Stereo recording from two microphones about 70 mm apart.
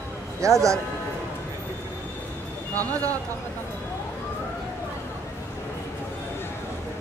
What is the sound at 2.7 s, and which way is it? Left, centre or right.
Speech, right.